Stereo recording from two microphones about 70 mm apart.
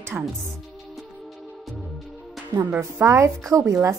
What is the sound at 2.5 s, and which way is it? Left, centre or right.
A woman's voice, right.